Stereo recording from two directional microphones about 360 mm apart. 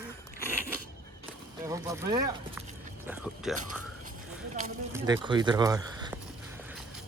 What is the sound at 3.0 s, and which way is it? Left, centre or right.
Music, centre.